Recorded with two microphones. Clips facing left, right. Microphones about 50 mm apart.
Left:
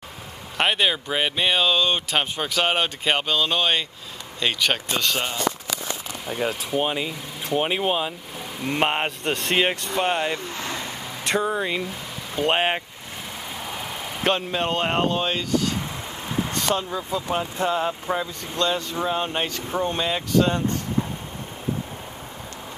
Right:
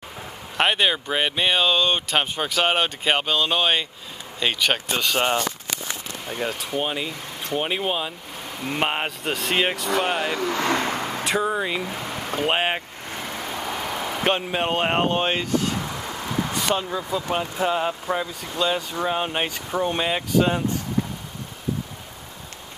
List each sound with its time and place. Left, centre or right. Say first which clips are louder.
0.6 s speech: right 1 dB; centre
6.2 s speech: left 2 dB; centre
10.3 s vehicle: right 7 dB; right
11.2 s speech: left 1 dB; centre
12.1 s vehicle: right 6 dB; right
12.4 s speech: left 1 dB; centre
13.5 s vehicle: right 4 dB; centre
14.6 s speech: right 1 dB; centre
15.0 s speech: right 1 dB; right
16.5 s speech: even; centre